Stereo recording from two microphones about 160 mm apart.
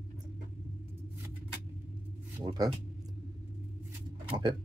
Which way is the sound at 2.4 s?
35° right (ahead or behind).